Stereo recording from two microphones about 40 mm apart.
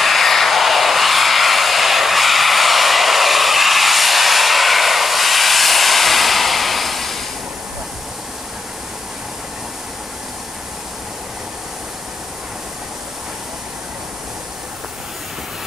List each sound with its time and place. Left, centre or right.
0.0 s vehicle: centre